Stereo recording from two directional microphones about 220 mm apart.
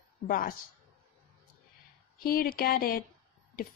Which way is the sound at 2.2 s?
40° left (ahead or behind).